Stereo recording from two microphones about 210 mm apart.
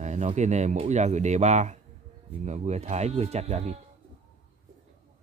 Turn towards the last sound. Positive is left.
turn(degrees=-30)  # may be behind; listen again after turning